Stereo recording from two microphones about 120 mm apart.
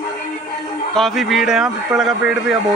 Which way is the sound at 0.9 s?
Centre (ahead or behind).